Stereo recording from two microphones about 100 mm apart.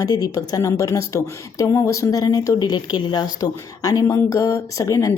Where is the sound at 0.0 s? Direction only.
40° left (ahead or behind).